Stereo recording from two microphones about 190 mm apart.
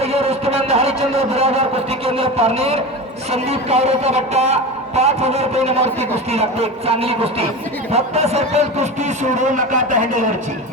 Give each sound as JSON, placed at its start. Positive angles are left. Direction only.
{"t": 0.0, "sound": "a man's voice", "side_deg": -35}